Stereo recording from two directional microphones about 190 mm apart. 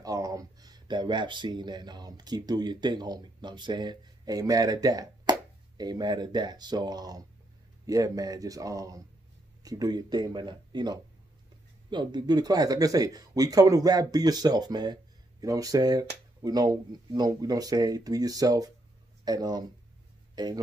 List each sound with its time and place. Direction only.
0.0 s speech: 20° right (ahead or behind)